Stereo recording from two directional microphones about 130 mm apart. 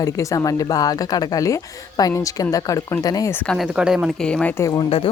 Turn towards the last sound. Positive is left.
turn(degrees=45)  # may be behind; listen again after turning